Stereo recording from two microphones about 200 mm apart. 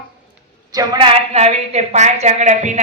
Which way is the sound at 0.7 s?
20° right (ahead or behind).